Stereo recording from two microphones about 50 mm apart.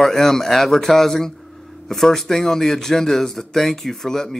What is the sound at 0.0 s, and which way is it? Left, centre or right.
Speech, centre.